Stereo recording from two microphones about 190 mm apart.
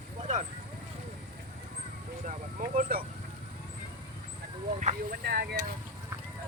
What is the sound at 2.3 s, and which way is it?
Speech, 45° right (ahead or behind).